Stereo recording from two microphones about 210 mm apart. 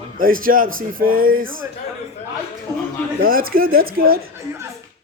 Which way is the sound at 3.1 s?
45° right (ahead or behind).